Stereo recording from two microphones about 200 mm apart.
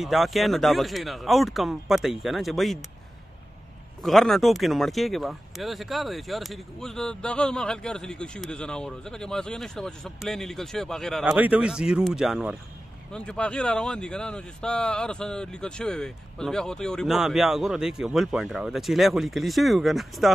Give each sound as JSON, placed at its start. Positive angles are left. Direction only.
{"t": 0.0, "sound": "speech", "side_deg": 0}
{"t": 4.0, "sound": "speech", "side_deg": 0}